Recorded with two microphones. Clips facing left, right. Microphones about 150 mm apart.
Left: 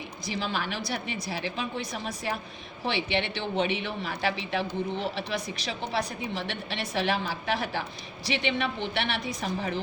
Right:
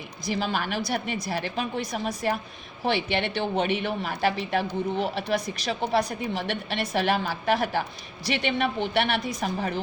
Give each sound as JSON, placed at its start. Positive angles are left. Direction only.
{"t": 0.3, "sound": "a woman's voice", "side_deg": -45}